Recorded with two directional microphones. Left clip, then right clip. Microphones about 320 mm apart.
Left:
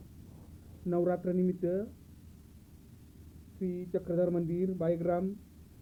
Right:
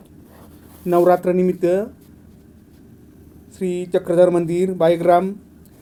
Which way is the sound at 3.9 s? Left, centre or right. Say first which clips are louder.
Right 17 dB; right.